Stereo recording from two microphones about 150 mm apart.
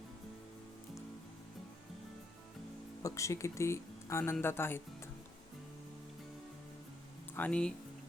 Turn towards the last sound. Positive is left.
turn(degrees=10)  # may be behind; listen again after turning